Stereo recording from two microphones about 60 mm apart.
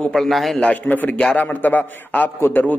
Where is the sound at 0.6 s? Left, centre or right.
Left.